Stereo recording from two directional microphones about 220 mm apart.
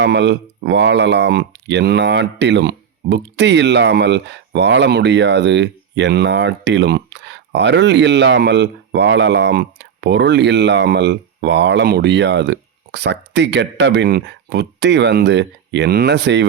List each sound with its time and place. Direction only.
0.0 s speech: 50° right (ahead or behind)